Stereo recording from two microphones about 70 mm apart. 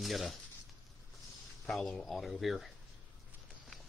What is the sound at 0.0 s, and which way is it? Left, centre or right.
Speech, centre.